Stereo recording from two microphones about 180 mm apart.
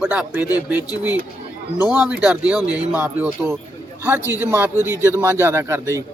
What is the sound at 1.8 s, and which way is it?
Speech, 5° right (ahead or behind).